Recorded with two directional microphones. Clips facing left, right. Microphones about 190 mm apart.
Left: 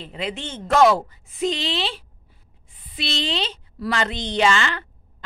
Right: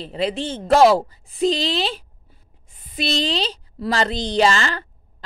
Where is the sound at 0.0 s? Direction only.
35° right (ahead or behind).